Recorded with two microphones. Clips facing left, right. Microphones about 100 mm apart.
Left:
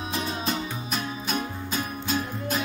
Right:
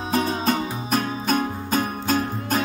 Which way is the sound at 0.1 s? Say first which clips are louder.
Right 8 dB; 40° right (ahead or behind).